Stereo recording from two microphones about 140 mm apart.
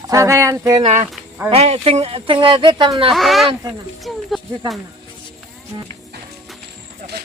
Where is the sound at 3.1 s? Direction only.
Centre (ahead or behind).